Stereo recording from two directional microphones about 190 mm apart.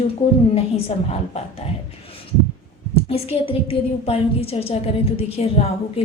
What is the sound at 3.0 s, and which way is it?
A woman's voice, 30° left (ahead or behind).